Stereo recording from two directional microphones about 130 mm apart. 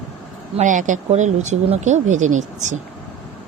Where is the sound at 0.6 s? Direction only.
75° right (ahead or behind).